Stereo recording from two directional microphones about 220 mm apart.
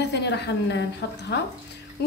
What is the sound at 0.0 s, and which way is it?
Speech, 50° left (ahead or behind).